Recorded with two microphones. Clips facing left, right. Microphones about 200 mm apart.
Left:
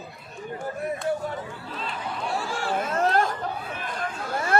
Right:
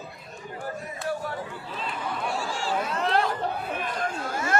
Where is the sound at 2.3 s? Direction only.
60° left (ahead or behind).